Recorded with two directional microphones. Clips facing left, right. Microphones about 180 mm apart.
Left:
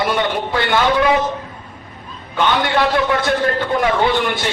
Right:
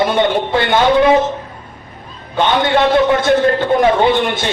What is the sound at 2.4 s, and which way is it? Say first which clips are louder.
A man's voice: right 3 dB; 20° right (ahead or behind).